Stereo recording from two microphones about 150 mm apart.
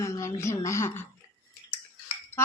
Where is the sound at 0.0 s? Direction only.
20° left (ahead or behind).